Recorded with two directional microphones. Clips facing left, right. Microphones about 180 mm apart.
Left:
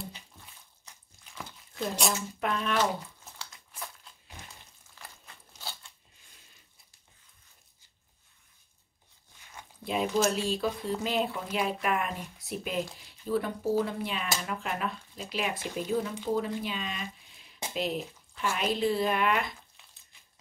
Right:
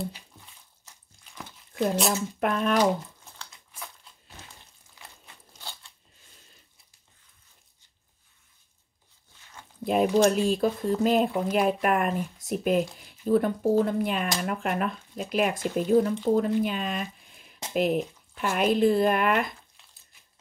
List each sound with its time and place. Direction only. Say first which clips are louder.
2.4 s speech: right 5 dB; 50° right (ahead or behind)
2.9 s crumpling: right 7 dB; 5° left (ahead or behind)
5.0 s a sound: even; 15° right (ahead or behind)
9.8 s speech: right 6 dB; 50° right (ahead or behind)